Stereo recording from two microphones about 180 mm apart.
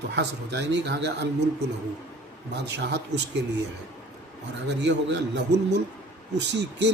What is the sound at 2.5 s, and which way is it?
Speech, 75° right (ahead or behind).